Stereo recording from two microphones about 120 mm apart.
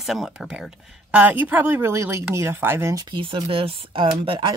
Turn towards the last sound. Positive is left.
turn(degrees=-45)  # may be behind; listen again after turning